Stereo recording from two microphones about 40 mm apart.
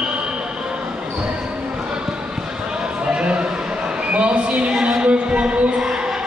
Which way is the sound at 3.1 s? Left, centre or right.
Right.